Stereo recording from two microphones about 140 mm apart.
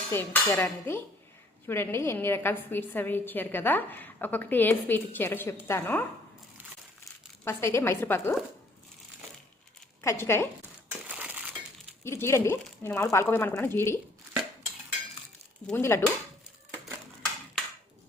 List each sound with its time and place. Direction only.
0.1 s a woman's voice: 15° left (ahead or behind)
7.4 s a woman's voice: 20° left (ahead or behind)
10.0 s a woman's voice: 20° left (ahead or behind)
11.1 s crushing: 10° right (ahead or behind)
12.0 s a woman's voice: 20° left (ahead or behind)
15.6 s a woman's voice: 15° left (ahead or behind)